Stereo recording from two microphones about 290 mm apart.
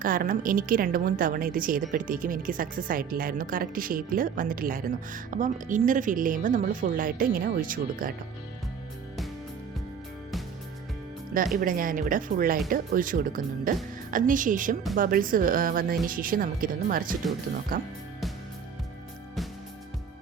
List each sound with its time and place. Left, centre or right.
0.0 s a woman's voice: right
11.6 s a woman's voice: right